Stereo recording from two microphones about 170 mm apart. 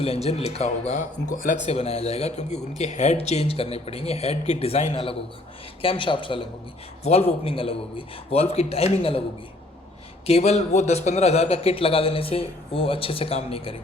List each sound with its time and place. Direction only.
0.0 s speech: 35° left (ahead or behind)
1.6 s speech: 40° left (ahead or behind)
10.2 s speech: 40° left (ahead or behind)